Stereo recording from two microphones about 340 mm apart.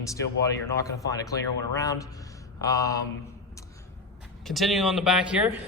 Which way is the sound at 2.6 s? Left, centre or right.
Centre.